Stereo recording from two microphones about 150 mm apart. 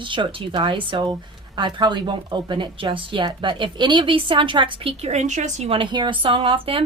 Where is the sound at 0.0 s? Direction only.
35° right (ahead or behind); by 5.7 s 50° right (ahead or behind).